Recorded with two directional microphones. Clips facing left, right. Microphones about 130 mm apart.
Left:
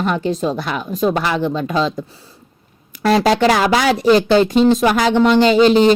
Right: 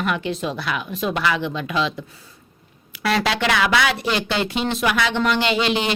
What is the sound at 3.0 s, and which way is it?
Speech, 40° left (ahead or behind).